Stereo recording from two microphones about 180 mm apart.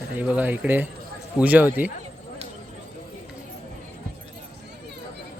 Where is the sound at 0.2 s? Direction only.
10° right (ahead or behind).